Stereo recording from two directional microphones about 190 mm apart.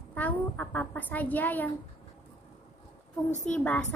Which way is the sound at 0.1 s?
10° left (ahead or behind).